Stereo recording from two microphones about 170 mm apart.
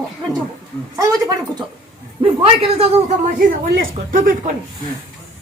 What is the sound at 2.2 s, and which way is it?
Speech, 35° right (ahead or behind).